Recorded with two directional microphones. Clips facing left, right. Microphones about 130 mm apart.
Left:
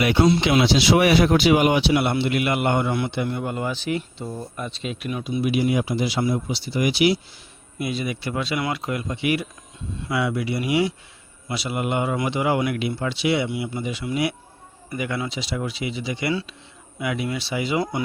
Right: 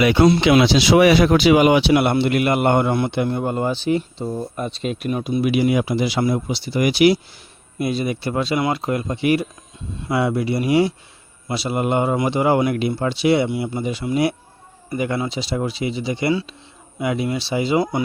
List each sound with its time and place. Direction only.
0.2 s speech: 80° right; by 5.4 s 45° right (ahead or behind)
5.4 s speech: 80° right; by 7.2 s 55° right (ahead or behind)
7.8 s speech: 40° right (ahead or behind)